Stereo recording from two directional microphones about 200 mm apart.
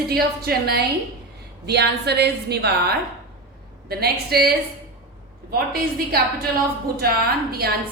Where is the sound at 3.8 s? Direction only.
50° right (ahead or behind).